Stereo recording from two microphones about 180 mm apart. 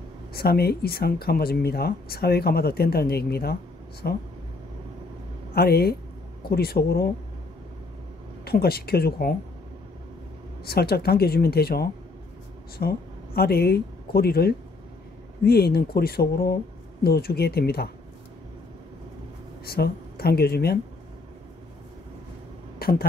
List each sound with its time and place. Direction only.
0.3 s speech: 60° left (ahead or behind)
5.5 s speech: 60° left (ahead or behind)
8.5 s speech: 60° left (ahead or behind)
10.6 s speech: 60° left (ahead or behind)
19.6 s a woman's voice: 60° left (ahead or behind)
22.8 s a sound: 55° left (ahead or behind)